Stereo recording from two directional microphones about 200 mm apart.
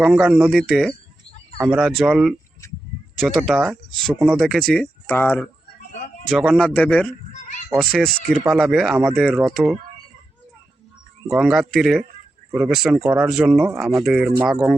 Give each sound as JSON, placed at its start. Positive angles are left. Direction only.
{"t": 0.0, "sound": "speech", "side_deg": -5}
{"t": 6.2, "sound": "speech", "side_deg": 0}
{"t": 7.3, "sound": "cat", "side_deg": 35}
{"t": 7.9, "sound": "speech", "side_deg": 0}
{"t": 11.3, "sound": "speech", "side_deg": 0}